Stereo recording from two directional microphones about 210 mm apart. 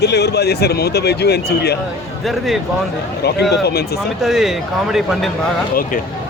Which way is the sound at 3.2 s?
50° left (ahead or behind).